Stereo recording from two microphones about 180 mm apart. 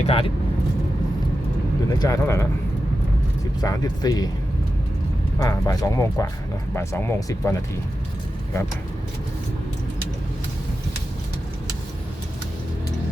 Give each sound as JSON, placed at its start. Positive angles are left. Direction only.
{"t": 0.0, "sound": "speech", "side_deg": 35}
{"t": 1.9, "sound": "speech", "side_deg": 20}
{"t": 3.6, "sound": "speech", "side_deg": 20}
{"t": 5.4, "sound": "speech", "side_deg": 20}